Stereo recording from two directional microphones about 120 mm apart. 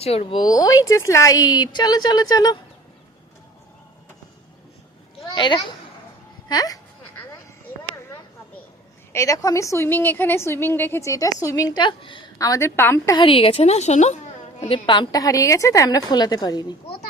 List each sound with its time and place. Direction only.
0.0 s a woman's voice: 55° left (ahead or behind)
0.3 s a woman's voice: 30° left (ahead or behind)
5.3 s a child's voice: 40° left (ahead or behind)
9.1 s a woman's voice: 25° left (ahead or behind)
11.8 s a woman's voice: 45° left (ahead or behind)
12.4 s a woman's voice: 25° left (ahead or behind)
13.1 s a woman's voice: 50° left (ahead or behind); by 14.2 s 70° left (ahead or behind)
14.7 s a woman's voice: 40° left (ahead or behind)